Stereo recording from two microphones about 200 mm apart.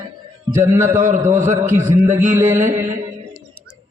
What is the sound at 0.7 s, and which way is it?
Speech, 15° right (ahead or behind).